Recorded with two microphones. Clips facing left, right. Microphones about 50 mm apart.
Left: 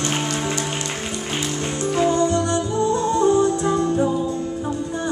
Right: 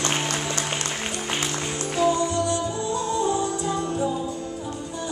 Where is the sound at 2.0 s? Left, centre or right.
Left.